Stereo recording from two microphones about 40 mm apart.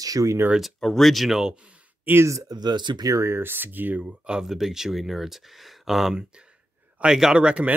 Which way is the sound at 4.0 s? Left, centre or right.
Right.